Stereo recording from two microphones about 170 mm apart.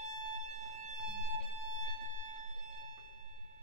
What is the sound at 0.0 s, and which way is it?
Violin, 45° right (ahead or behind).